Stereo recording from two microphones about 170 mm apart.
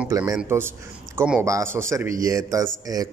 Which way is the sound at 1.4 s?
15° right (ahead or behind).